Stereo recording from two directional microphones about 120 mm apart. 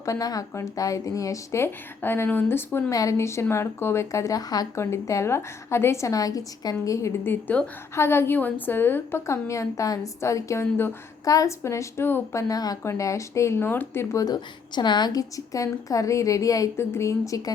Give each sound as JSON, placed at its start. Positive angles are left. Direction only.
{"t": 0.0, "sound": "speech", "side_deg": 30}